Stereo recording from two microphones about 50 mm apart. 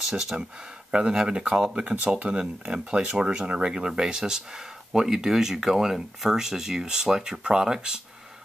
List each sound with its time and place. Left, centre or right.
0.1 s speech: centre